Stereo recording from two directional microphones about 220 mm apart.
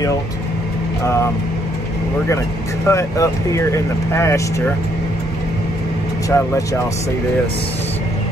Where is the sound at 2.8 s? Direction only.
15° left (ahead or behind).